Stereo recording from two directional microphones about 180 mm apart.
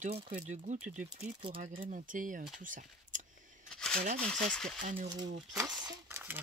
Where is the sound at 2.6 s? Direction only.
45° right (ahead or behind).